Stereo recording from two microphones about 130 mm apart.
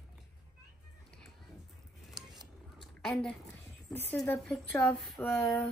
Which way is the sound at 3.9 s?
15° left (ahead or behind).